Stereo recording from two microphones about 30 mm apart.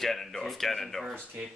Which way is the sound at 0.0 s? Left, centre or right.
Centre.